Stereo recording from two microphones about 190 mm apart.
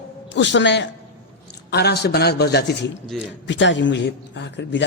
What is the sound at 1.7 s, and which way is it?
A man's voice, 60° left (ahead or behind).